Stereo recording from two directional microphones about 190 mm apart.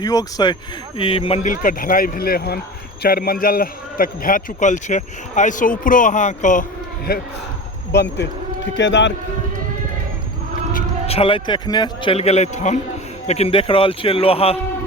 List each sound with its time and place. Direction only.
0.0 s a man's voice: 20° left (ahead or behind); by 7.2 s 50° left (ahead or behind)
7.9 s a man's voice: 65° left (ahead or behind)
11.0 s a man's voice: 30° left (ahead or behind)